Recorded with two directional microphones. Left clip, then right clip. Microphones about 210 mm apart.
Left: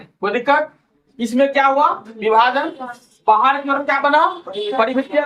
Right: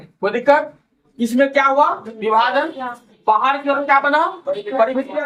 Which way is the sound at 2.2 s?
25° left (ahead or behind).